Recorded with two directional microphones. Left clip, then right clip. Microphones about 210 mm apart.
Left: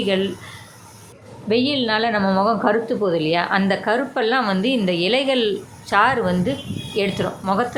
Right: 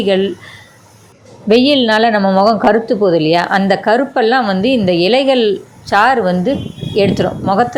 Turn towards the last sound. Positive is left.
turn(degrees=-20)  # may be behind; listen again after turning